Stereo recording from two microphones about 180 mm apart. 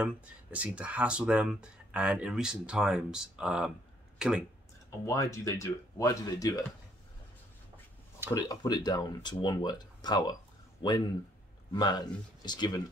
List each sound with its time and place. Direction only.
0.0 s speech: 5° right (ahead or behind)
5.0 s speech: 15° left (ahead or behind)
8.4 s speech: 20° left (ahead or behind)